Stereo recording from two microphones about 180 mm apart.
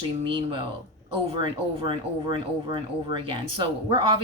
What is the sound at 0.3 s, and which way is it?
Speech, 30° right (ahead or behind).